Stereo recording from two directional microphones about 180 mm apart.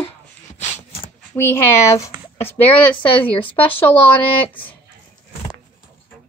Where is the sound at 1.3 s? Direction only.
15° left (ahead or behind).